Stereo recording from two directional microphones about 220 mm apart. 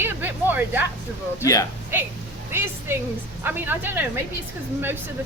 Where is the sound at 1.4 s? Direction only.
15° left (ahead or behind).